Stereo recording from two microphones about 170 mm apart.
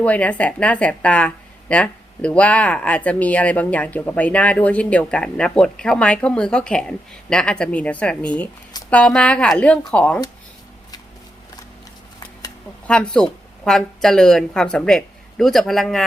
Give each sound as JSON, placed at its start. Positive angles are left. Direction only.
{"t": 0.0, "sound": "speech", "side_deg": 10}
{"t": 12.9, "sound": "speech", "side_deg": 5}